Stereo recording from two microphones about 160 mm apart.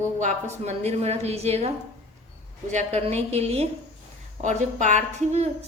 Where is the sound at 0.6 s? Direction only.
45° right (ahead or behind).